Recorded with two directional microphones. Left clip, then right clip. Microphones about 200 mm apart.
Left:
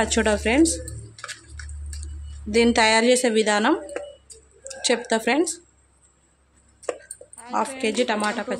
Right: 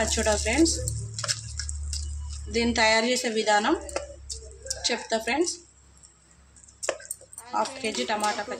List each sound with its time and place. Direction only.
0.0 s a woman's voice: 50° left (ahead or behind)
2.5 s a woman's voice: 50° left (ahead or behind)
4.8 s a woman's voice: 50° left (ahead or behind)
7.3 s a woman's voice: 50° left (ahead or behind)